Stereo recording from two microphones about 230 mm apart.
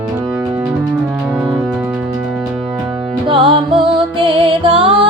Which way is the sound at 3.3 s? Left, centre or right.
Right.